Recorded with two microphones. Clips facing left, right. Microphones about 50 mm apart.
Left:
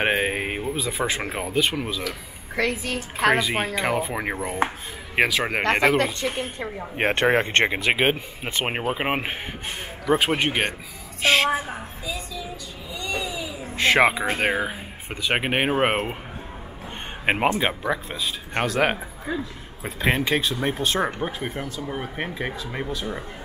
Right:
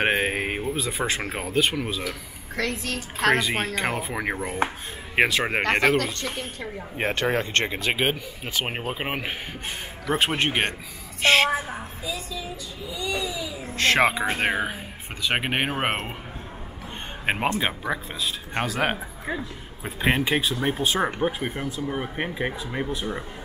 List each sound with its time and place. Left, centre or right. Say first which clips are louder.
0.0 s speech: even; centre
1.9 s speech: left 1 dB; centre
2.5 s speech: left 3 dB; centre
6.0 s speech: left 4 dB; centre
7.2 s speech: left 5 dB; left
10.0 s speech: left 2 dB; centre
13.3 s speech: even; centre
17.3 s speech: left 3 dB; centre
17.6 s speech: left 2 dB; centre
20.0 s speech: even; centre